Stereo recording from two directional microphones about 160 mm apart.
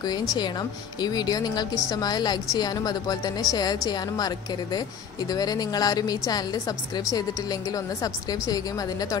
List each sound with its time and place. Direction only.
0.0 s a woman's voice: 25° left (ahead or behind)
5.3 s a woman's voice: 25° left (ahead or behind)
7.7 s a woman's voice: 25° left (ahead or behind)